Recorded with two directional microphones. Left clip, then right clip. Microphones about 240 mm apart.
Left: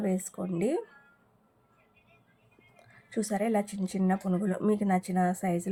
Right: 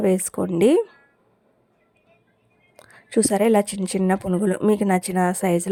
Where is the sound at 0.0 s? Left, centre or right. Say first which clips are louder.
Right 12 dB; right.